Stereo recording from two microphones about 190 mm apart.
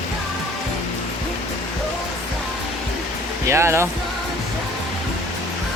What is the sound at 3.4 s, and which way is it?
Speech, 15° right (ahead or behind).